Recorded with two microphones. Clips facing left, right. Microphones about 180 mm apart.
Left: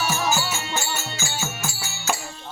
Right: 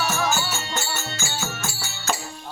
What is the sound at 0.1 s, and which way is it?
Music, 10° left (ahead or behind).